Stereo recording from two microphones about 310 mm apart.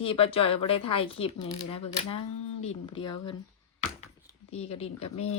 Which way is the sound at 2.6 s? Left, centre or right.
Centre.